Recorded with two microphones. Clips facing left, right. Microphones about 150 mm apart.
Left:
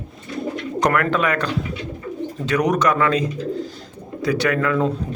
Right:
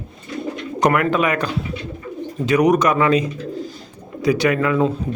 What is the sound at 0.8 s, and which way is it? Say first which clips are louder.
Speech: right 2 dB; 10° right (ahead or behind).